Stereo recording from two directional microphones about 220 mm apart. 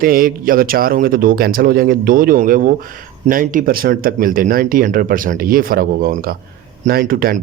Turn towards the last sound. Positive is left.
turn(degrees=-40)  # may be behind; listen again after turning